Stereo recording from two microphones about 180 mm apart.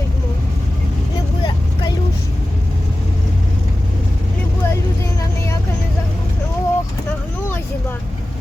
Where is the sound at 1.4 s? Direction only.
25° left (ahead or behind).